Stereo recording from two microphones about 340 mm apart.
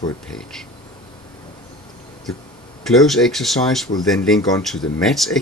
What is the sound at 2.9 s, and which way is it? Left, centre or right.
Speech, centre.